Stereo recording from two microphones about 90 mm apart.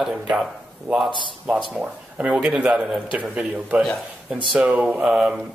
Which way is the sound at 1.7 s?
15° right (ahead or behind).